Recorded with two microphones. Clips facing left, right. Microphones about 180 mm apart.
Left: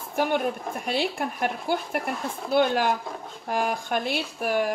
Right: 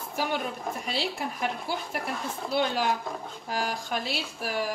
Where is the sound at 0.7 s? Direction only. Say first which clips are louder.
Left 3 dB; centre (ahead or behind).